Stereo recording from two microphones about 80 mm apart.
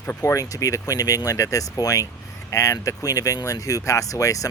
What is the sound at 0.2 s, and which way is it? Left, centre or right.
Speech, left.